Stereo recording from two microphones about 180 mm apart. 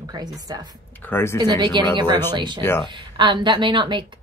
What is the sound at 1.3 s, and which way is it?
A woman's voice, 25° right (ahead or behind).